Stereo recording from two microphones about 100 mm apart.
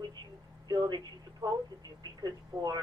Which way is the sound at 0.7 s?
45° right (ahead or behind).